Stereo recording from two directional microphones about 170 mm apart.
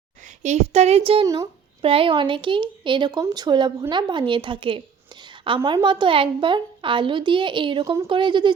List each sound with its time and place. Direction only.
0.4 s a woman's voice: 40° right (ahead or behind)